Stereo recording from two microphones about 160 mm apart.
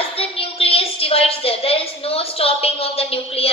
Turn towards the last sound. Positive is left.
turn(degrees=35)  # may be behind; listen again after turning